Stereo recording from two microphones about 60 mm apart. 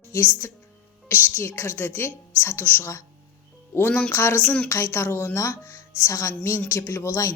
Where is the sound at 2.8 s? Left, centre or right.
Left.